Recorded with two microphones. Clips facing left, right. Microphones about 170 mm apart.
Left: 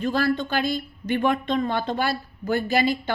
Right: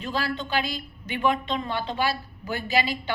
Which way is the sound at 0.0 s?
50° left (ahead or behind).